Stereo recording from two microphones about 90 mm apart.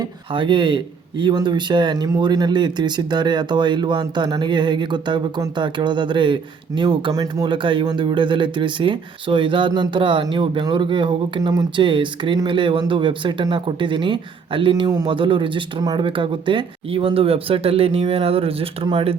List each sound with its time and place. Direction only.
0.0 s speech: 60° right (ahead or behind)
7.1 s speech: 40° right (ahead or behind)
7.4 s speech: 65° right (ahead or behind)
15.8 s speech: 45° right (ahead or behind)
16.0 s speech: 70° right (ahead or behind)